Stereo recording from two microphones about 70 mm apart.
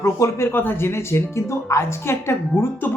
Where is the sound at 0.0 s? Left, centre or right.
Left.